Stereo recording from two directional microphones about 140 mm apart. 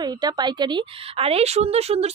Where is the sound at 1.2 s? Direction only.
45° right (ahead or behind).